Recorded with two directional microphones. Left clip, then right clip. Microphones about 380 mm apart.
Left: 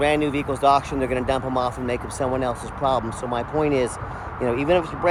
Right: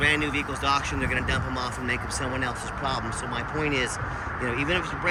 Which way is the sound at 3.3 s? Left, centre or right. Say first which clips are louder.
Left 8 dB; left.